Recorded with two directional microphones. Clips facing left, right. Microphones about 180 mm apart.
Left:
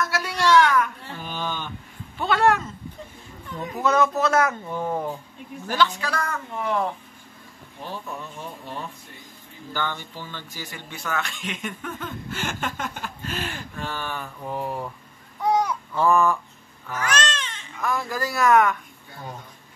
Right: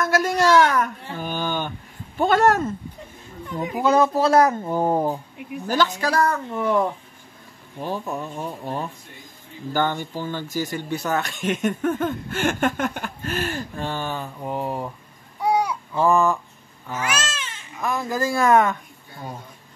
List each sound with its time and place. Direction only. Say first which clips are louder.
0.0 s a sound: right 5 dB; 45° right (ahead or behind)
2.1 s speech: right 3 dB; 45° right (ahead or behind)
3.8 s speech: right 3 dB; 30° right (ahead or behind)
7.8 s speech: right 7 dB; 45° right (ahead or behind); by 14.9 s 15° right (ahead or behind)
15.4 s a sound: right 1 dB; 10° right (ahead or behind)
17.0 s cat: left 2 dB; 10° right (ahead or behind)
17.8 s speech: right 3 dB; 20° right (ahead or behind)